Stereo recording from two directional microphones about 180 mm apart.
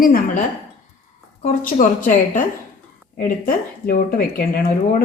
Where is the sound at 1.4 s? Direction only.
45° left (ahead or behind).